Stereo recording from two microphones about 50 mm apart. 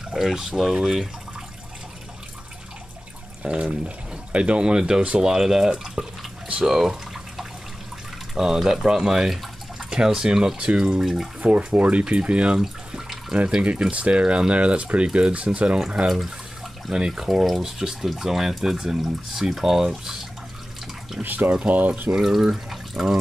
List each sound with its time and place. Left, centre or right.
0.1 s speech: centre
3.4 s speech: centre
6.6 s bathtub: centre
8.4 s speech: centre
11.4 s speech: right
12.5 s bathtub: centre
13.5 s speech: centre
16.1 s speech: centre
21.2 s speech: right
22.1 s speech: centre